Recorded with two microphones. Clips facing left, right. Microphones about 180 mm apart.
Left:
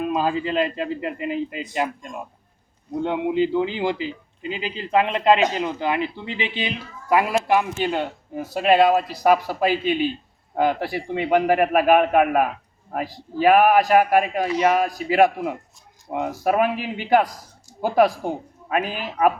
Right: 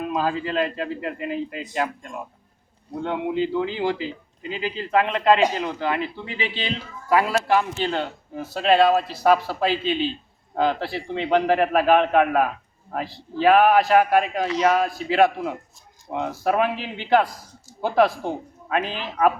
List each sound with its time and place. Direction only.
0.1 s a man's voice: 20° left (ahead or behind)